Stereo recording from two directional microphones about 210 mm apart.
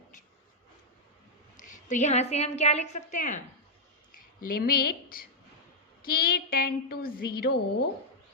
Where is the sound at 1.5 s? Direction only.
35° left (ahead or behind).